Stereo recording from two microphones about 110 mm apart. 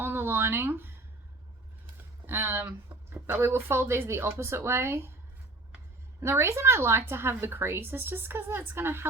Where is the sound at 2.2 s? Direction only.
20° right (ahead or behind).